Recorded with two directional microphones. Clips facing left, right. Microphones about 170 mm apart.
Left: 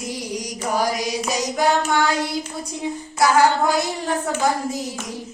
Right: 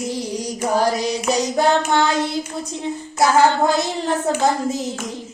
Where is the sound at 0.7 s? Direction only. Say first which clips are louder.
Right 3 dB; 10° left (ahead or behind).